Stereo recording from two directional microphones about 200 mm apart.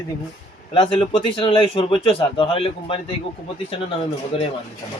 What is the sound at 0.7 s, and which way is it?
Speech, 25° left (ahead or behind).